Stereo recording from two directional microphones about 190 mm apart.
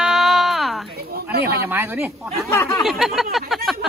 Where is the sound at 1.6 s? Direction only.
10° right (ahead or behind).